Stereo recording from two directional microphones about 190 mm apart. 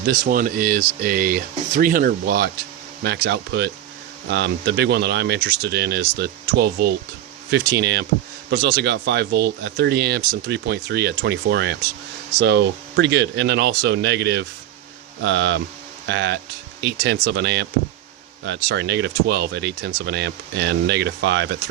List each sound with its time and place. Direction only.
0.0 s speech: 50° right (ahead or behind)